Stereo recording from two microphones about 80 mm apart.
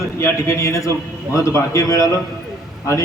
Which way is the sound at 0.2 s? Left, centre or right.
Left.